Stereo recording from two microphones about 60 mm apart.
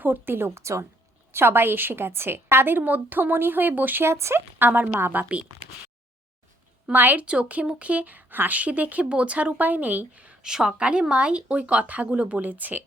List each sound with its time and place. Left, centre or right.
0.0 s a woman's voice: right
0.6 s speech: right
1.3 s a woman's voice: right
4.0 s a woman's voice: right
6.8 s a woman's voice: right
7.3 s speech: right
10.4 s a woman's voice: centre; by 12.8 s right